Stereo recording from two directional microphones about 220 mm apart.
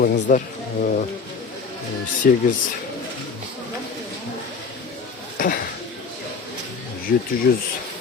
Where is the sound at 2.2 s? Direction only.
40° left (ahead or behind).